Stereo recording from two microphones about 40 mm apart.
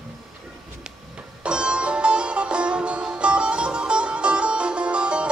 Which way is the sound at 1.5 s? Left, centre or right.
Right.